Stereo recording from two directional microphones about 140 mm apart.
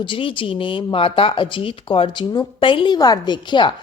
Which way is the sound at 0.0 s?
35° left (ahead or behind).